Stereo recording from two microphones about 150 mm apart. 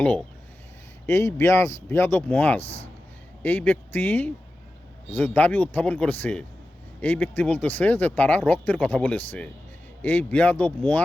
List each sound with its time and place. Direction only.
0.0 s speech: 10° left (ahead or behind)
1.0 s speech: 20° left (ahead or behind)
2.6 s speech: 40° left (ahead or behind)
3.4 s speech: 10° left (ahead or behind)